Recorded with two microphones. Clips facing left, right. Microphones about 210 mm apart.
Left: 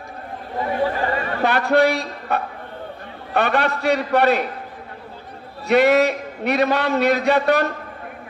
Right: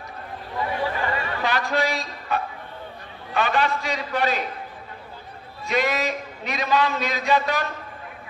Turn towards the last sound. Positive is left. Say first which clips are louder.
# left 6 dB
turn(degrees=60)  # may be behind; listen again after turning